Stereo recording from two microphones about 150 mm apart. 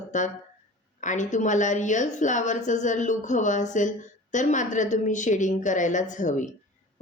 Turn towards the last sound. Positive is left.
turn(degrees=55)  # may be behind; listen again after turning